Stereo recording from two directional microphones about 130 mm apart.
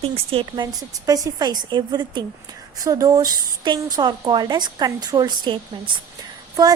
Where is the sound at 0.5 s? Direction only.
35° right (ahead or behind).